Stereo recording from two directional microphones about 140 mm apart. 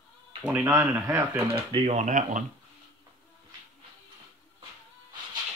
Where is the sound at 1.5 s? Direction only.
40° right (ahead or behind); by 2.4 s 65° right (ahead or behind).